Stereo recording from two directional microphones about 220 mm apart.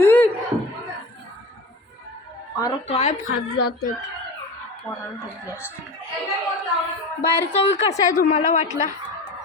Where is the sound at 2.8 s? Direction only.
30° left (ahead or behind).